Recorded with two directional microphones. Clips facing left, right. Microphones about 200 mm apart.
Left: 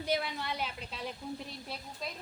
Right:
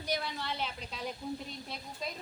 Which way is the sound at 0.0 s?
25° left (ahead or behind).